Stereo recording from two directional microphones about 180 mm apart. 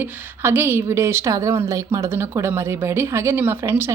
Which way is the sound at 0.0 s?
15° right (ahead or behind).